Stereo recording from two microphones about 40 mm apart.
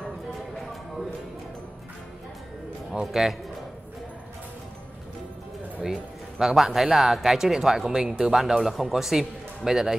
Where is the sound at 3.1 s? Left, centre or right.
Centre.